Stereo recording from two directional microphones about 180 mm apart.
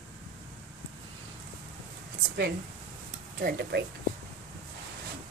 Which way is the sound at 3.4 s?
65° right (ahead or behind).